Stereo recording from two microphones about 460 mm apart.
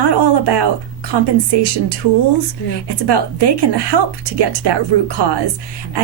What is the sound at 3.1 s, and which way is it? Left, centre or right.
A woman's voice, right.